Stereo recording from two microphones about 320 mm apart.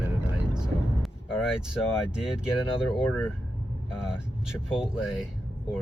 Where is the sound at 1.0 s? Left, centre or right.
Centre.